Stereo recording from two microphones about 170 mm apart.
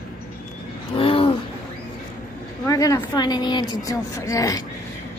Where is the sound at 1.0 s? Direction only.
30° left (ahead or behind).